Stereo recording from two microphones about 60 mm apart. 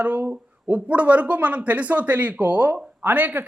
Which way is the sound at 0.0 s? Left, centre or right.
Right.